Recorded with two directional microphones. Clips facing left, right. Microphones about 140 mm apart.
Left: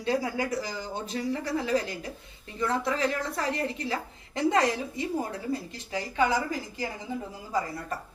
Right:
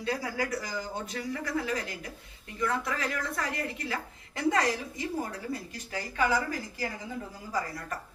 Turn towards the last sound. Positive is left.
turn(degrees=25)  # may be behind; listen again after turning